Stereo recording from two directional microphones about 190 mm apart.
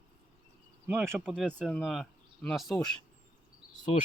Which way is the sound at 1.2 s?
Centre (ahead or behind).